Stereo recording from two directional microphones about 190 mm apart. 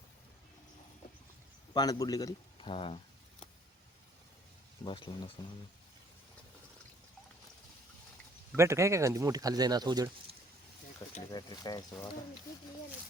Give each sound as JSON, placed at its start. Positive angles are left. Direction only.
{"t": 1.7, "sound": "a man's voice", "side_deg": 20}
{"t": 4.8, "sound": "a man's voice", "side_deg": 25}
{"t": 8.5, "sound": "speech", "side_deg": -15}
{"t": 11.3, "sound": "a man's voice", "side_deg": 20}